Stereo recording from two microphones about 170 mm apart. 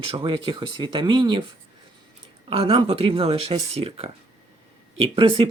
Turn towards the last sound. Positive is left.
turn(degrees=-30)  # may be behind; listen again after turning